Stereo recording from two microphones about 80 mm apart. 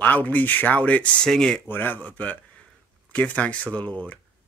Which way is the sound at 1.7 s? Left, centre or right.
Left.